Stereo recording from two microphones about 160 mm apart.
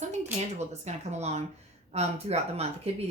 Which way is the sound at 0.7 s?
45° right (ahead or behind).